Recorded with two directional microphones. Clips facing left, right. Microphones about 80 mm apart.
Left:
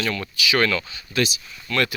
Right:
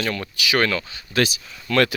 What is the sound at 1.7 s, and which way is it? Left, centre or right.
Speech, right.